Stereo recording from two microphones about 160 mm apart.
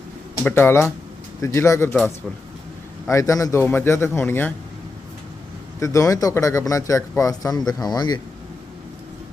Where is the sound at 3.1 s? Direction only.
20° left (ahead or behind).